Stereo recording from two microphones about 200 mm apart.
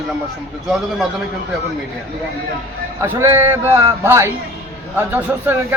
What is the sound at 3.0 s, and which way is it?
Speech, 15° right (ahead or behind).